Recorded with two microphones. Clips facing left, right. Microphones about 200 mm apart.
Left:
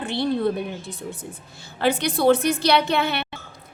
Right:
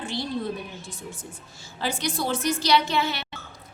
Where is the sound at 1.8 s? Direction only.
60° left (ahead or behind).